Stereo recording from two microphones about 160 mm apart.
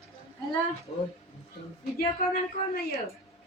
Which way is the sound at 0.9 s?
35° left (ahead or behind).